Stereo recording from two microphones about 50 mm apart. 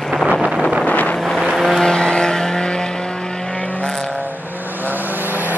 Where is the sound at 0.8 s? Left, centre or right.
Left.